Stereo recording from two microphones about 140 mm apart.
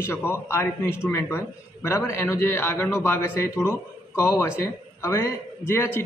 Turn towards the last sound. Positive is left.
turn(degrees=15)  # may be behind; listen again after turning